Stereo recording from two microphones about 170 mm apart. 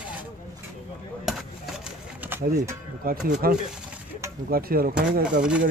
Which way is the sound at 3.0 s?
60° right (ahead or behind).